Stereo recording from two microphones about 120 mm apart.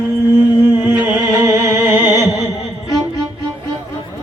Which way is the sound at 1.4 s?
25° right (ahead or behind).